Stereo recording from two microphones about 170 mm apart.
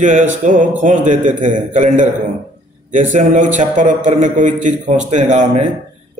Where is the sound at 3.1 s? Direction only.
45° right (ahead or behind).